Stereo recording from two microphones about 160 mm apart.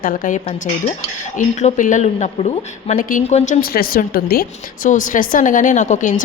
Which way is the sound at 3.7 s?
65° left (ahead or behind).